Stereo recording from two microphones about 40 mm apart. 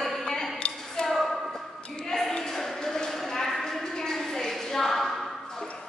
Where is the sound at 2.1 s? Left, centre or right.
Centre.